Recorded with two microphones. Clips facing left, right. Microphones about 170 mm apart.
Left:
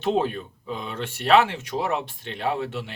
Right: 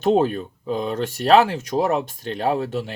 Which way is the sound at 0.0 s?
45° right (ahead or behind).